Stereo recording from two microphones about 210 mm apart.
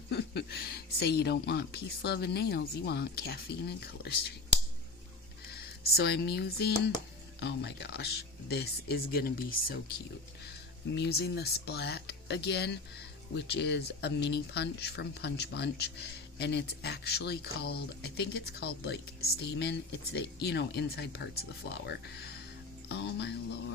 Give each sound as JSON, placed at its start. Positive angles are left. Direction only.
{"t": 0.1, "sound": "speech", "side_deg": 50}
{"t": 5.5, "sound": "speech", "side_deg": 50}
{"t": 10.9, "sound": "speech", "side_deg": 50}